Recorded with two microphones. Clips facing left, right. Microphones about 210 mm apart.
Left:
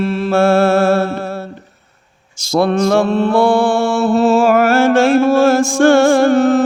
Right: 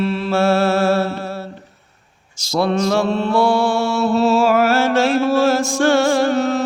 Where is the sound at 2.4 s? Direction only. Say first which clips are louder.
Left 4 dB; 55° left (ahead or behind).